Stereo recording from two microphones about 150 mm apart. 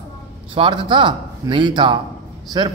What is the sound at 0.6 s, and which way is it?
A man's voice, 35° right (ahead or behind).